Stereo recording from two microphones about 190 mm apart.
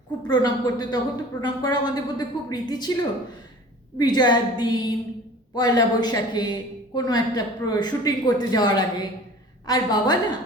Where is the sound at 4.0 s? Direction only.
20° left (ahead or behind).